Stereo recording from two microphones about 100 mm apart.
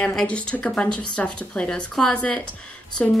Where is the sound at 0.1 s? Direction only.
10° left (ahead or behind).